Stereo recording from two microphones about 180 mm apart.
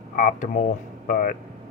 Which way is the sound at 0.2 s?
45° left (ahead or behind).